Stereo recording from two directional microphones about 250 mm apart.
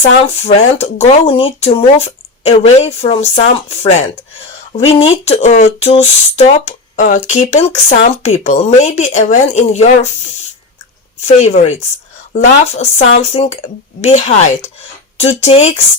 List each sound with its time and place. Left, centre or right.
0.4 s speech: left
11.3 s speech: left